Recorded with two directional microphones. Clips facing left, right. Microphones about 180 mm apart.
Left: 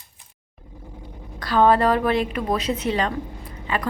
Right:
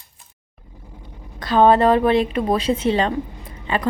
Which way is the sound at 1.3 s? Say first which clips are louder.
Right 3 dB; 20° right (ahead or behind).